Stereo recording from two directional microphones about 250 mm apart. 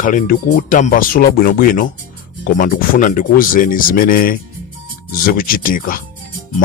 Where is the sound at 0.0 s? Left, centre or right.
Left.